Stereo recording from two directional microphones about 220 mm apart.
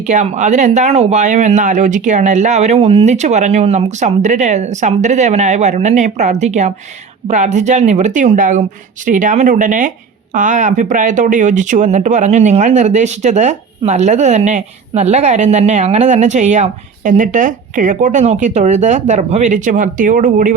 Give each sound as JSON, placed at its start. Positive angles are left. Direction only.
{"t": 0.0, "sound": "speech", "side_deg": -35}